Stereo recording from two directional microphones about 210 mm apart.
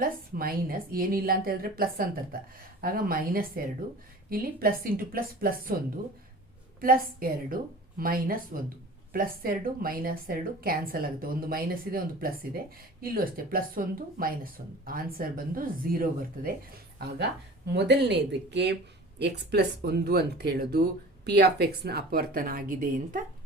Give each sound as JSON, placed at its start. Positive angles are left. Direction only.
{"t": 0.0, "sound": "speech", "side_deg": -45}
{"t": 6.7, "sound": "speech", "side_deg": -45}
{"t": 17.7, "sound": "speech", "side_deg": -55}